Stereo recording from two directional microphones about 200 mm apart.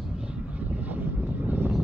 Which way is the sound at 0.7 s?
10° right (ahead or behind).